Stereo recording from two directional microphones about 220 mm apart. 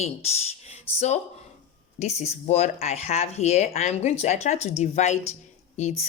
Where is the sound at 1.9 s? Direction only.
30° left (ahead or behind).